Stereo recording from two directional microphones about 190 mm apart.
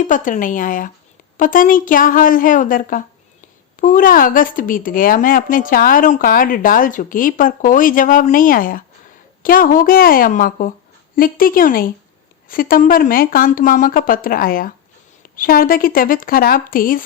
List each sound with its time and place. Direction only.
0.0 s a woman's voice: 45° left (ahead or behind)